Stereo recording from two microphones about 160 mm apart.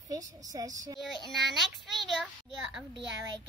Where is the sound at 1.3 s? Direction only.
Centre (ahead or behind).